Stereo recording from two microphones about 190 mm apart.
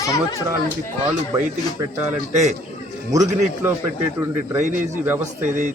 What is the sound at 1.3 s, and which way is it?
Speech, 15° right (ahead or behind).